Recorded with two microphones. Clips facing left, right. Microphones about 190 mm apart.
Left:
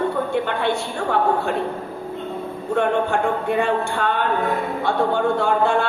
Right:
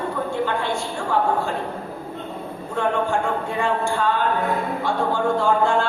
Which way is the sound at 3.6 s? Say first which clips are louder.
Left 1 dB; 65° left (ahead or behind).